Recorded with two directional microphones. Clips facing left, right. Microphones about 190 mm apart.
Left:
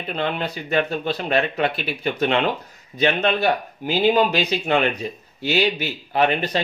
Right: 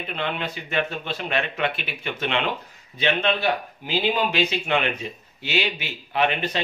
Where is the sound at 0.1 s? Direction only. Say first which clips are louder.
Left 5 dB; 40° left (ahead or behind).